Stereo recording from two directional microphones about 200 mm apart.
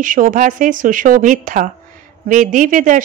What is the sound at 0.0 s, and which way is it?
A woman's voice, 40° right (ahead or behind).